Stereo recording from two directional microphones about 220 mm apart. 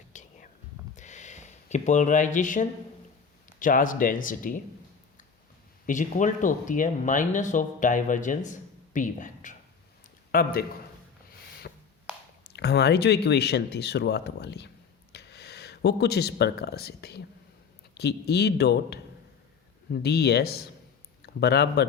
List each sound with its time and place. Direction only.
0.1 s whispering: 35° left (ahead or behind)
0.9 s a sound: 35° left (ahead or behind)
3.6 s speech: 35° left (ahead or behind)
5.8 s speech: 35° left (ahead or behind)
12.5 s speech: 50° left (ahead or behind)